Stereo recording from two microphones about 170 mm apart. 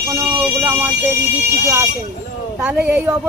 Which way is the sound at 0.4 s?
10° right (ahead or behind).